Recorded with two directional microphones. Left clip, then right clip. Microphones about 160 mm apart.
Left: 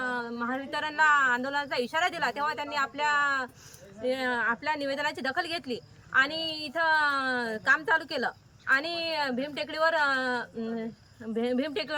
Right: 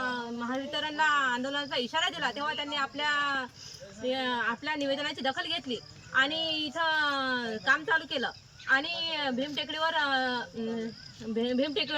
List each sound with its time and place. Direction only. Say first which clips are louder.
0.0 s speech: left 2 dB; 20° left (ahead or behind)